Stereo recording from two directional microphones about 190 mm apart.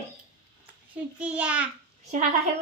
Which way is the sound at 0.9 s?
5° right (ahead or behind).